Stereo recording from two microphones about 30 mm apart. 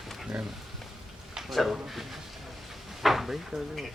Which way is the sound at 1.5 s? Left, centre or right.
Centre.